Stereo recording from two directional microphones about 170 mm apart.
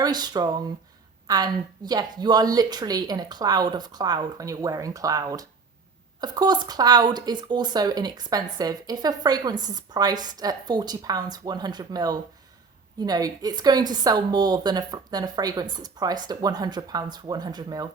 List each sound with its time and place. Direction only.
0.0 s a woman's voice: 25° right (ahead or behind)